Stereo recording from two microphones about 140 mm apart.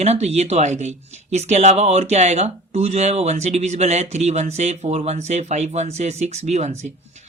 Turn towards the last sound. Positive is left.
turn(degrees=-55)  # may be behind; listen again after turning